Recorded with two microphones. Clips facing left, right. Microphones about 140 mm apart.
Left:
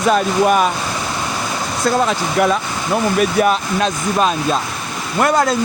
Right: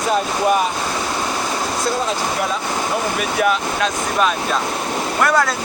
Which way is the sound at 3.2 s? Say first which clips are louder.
Left 3 dB; 35° left (ahead or behind).